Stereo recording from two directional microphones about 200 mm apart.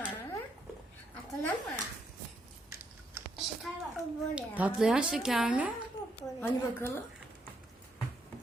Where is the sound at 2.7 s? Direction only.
10° right (ahead or behind).